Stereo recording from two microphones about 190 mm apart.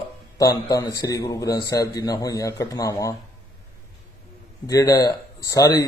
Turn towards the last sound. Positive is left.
turn(degrees=20)  # may be behind; listen again after turning